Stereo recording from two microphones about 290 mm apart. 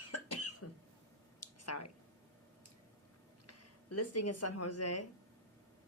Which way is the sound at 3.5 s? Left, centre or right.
Left.